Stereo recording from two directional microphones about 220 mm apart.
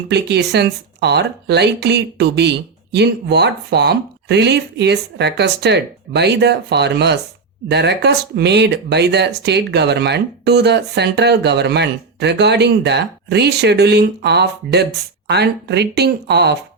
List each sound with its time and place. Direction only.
0.1 s speech: 50° right (ahead or behind)